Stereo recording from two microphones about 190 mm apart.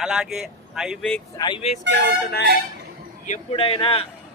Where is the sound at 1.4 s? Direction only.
25° left (ahead or behind).